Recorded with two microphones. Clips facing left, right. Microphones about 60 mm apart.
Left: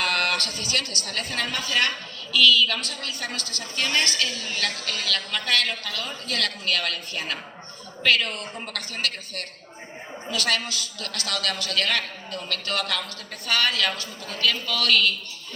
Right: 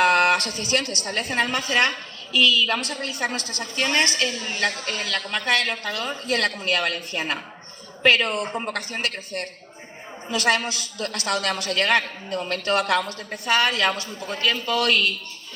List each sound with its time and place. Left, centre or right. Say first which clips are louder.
0.0 s a woman's voice: right 7 dB; right